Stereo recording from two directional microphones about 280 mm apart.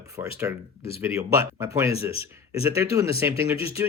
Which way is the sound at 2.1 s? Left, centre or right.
Centre.